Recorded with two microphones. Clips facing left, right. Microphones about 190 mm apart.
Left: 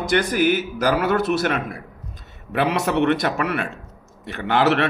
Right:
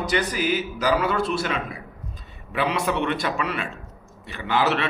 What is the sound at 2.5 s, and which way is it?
A man's voice, 65° left (ahead or behind).